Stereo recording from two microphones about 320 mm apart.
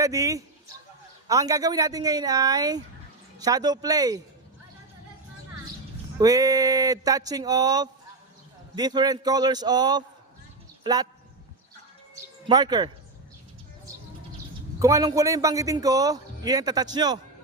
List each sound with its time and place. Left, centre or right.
0.0 s a man's voice: centre
6.1 s a man's voice: centre
12.1 s music: centre
14.8 s a man's voice: centre